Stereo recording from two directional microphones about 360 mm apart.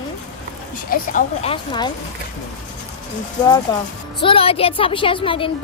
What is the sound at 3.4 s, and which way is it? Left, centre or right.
Speech, centre.